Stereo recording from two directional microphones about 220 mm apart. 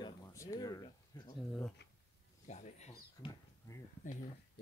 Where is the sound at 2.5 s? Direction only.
30° left (ahead or behind).